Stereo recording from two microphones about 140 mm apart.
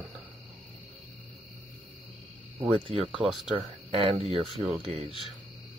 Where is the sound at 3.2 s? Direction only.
Centre (ahead or behind).